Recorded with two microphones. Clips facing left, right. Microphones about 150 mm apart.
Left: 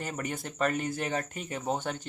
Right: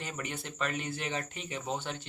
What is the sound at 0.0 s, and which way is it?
Speech, 45° left (ahead or behind).